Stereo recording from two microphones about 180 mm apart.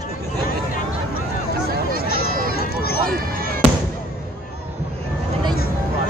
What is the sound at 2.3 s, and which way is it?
Run, 55° right (ahead or behind).